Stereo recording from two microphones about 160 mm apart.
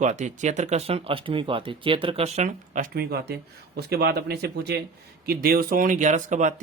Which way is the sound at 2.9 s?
75° right (ahead or behind).